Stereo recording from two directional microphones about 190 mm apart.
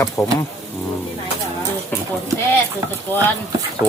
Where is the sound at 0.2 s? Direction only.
15° left (ahead or behind).